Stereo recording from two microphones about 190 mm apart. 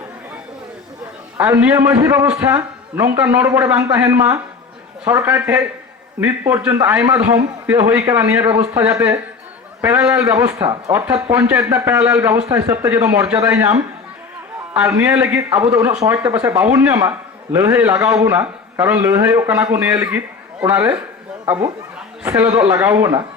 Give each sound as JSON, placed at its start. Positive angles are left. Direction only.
{"t": 1.4, "sound": "a man's voice", "side_deg": -15}